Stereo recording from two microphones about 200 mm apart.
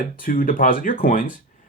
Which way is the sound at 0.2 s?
45° left (ahead or behind).